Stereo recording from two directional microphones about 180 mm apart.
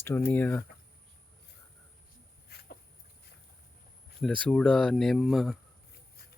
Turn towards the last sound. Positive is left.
turn(degrees=0)  # may be behind; listen again after turning